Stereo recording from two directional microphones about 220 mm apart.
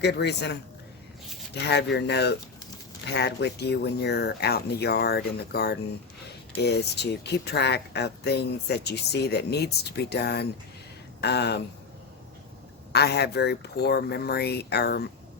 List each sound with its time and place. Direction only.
0.0 s speech: 50° left (ahead or behind)
1.6 s speech: 50° left (ahead or behind)
12.9 s speech: 50° left (ahead or behind)